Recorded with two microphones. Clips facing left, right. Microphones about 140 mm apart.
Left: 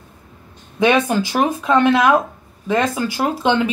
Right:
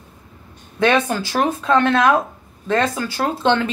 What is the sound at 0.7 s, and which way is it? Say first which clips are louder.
Speech: left 2 dB; 15° left (ahead or behind).